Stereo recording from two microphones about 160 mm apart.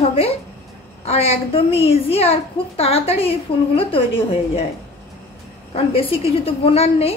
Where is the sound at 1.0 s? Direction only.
40° left (ahead or behind).